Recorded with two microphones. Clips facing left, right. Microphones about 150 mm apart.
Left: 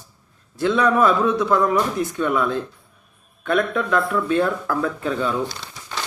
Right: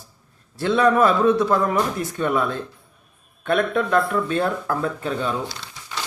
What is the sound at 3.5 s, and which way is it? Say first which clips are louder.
Speech: right 1 dB; 40° right (ahead or behind).